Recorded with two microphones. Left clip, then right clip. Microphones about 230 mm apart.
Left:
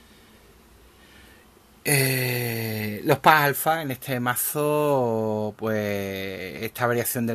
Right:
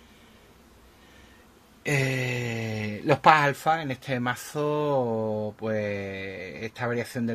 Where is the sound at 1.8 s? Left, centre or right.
Left.